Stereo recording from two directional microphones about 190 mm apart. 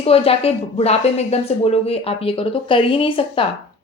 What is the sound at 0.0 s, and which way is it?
Speech, 30° left (ahead or behind).